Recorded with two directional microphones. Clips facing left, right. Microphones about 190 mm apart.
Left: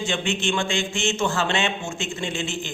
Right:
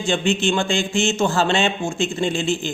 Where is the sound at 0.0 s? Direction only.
35° right (ahead or behind).